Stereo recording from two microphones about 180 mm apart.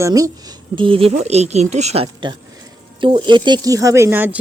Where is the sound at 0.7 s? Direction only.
30° right (ahead or behind).